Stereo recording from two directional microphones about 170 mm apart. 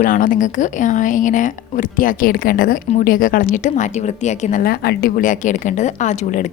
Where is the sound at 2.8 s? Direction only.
50° left (ahead or behind).